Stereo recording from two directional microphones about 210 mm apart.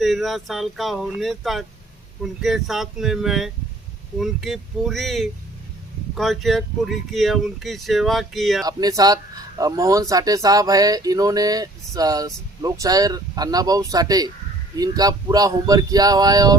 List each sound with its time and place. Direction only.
0.0 s speech: centre (ahead or behind)
8.6 s speech: 15° right (ahead or behind)